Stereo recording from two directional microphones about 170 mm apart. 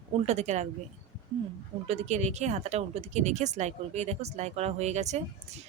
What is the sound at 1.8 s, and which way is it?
Speech, 40° right (ahead or behind).